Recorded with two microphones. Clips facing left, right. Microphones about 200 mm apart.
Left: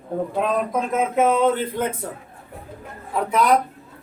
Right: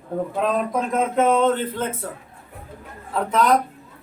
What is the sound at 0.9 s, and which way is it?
Speech, 5° left (ahead or behind).